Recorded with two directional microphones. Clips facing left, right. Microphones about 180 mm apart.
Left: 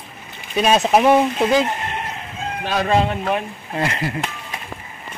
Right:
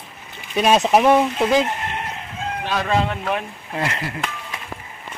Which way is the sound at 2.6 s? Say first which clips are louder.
Left 3 dB; 40° left (ahead or behind).